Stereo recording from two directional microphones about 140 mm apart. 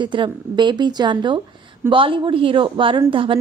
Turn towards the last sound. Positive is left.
turn(degrees=-40)  # may be behind; listen again after turning